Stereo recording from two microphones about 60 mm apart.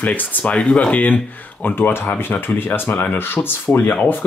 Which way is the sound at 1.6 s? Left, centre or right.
Left.